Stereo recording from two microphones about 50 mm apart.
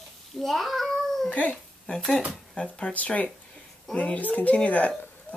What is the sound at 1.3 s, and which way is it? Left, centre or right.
Speech, left.